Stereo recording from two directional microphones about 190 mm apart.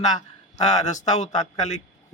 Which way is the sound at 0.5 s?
40° left (ahead or behind).